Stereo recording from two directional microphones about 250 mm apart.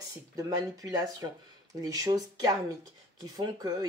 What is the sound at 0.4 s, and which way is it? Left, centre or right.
Speech, centre.